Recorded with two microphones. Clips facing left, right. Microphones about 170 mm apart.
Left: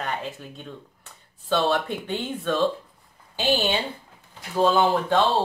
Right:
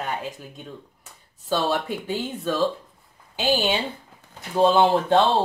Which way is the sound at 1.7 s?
5° right (ahead or behind).